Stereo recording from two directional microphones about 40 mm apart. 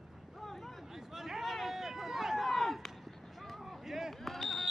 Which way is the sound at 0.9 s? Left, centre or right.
Centre.